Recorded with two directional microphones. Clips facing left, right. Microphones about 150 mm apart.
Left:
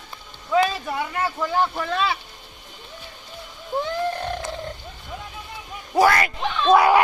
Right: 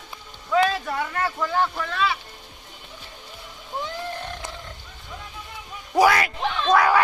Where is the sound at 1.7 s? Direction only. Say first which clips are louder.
Left 2 dB; 30° left (ahead or behind).